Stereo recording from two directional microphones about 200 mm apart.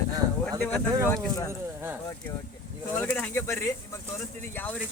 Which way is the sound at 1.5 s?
10° right (ahead or behind).